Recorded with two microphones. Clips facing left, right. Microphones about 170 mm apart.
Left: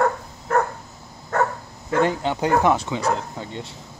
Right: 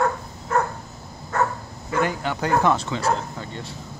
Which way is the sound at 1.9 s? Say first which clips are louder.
Left 3 dB; 25° left (ahead or behind).